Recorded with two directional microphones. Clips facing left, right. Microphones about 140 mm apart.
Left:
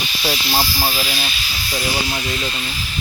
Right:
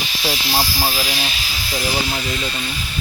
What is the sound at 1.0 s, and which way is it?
Speech, 15° right (ahead or behind).